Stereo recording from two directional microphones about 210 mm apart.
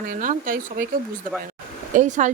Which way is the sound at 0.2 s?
40° right (ahead or behind).